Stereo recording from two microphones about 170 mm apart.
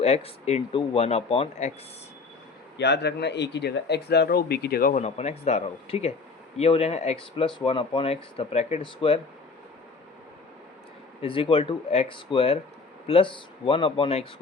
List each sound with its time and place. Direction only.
0.0 s speech: 40° left (ahead or behind)
2.7 s speech: 80° left; by 9.2 s 30° left (ahead or behind)
11.2 s speech: 30° left (ahead or behind)